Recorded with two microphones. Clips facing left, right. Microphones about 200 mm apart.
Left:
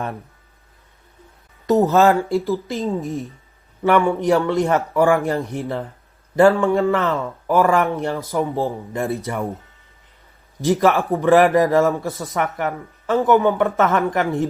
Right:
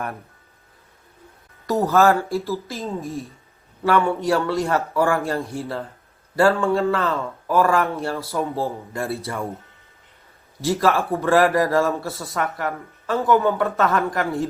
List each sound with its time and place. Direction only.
1.9 s a man's voice: 20° left (ahead or behind)
10.6 s a man's voice: 20° left (ahead or behind)